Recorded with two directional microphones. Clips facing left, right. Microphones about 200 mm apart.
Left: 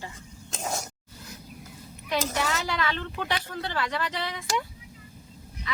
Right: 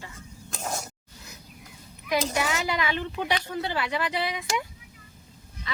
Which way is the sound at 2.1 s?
10° right (ahead or behind).